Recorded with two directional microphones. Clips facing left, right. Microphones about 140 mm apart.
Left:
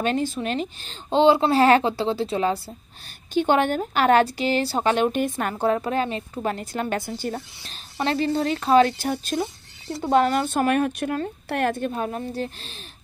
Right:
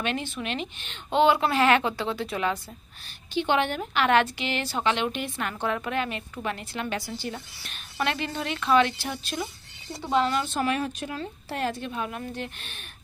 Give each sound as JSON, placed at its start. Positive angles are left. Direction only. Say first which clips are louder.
{"t": 0.0, "sound": "speech", "louder": "left 6 dB", "side_deg": 40}
{"t": 3.3, "sound": "speech", "louder": "left 5 dB", "side_deg": 45}
{"t": 10.0, "sound": "a woman's voice", "louder": "left 5 dB", "side_deg": 55}
{"t": 11.9, "sound": "speech", "louder": "left 5 dB", "side_deg": 40}